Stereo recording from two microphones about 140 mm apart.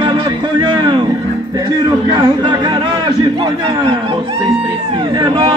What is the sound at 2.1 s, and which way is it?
Speech, 35° right (ahead or behind).